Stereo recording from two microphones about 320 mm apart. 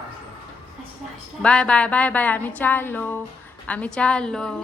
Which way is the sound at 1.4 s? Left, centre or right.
Centre.